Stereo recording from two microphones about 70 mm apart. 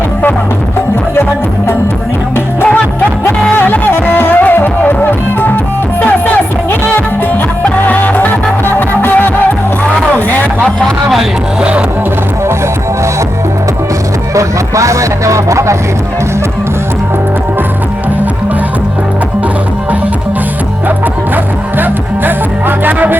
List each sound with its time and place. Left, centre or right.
3.5 s music: left
6.0 s music: left
14.3 s music: right
22.8 s music: right